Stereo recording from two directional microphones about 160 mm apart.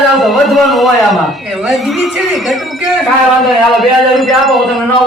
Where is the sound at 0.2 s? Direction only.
Centre (ahead or behind).